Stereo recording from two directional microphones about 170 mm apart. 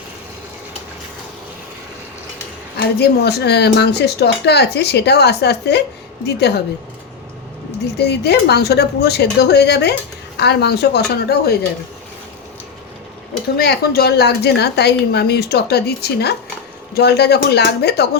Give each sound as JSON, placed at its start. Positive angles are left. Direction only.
{"t": 2.7, "sound": "speech", "side_deg": 70}
{"t": 7.9, "sound": "speech", "side_deg": 75}
{"t": 13.6, "sound": "speech", "side_deg": 70}